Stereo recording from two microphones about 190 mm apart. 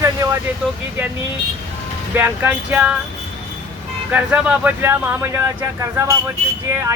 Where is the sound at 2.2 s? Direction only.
10° right (ahead or behind).